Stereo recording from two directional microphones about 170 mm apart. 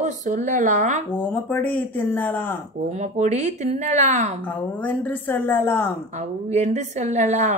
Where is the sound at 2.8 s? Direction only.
40° right (ahead or behind).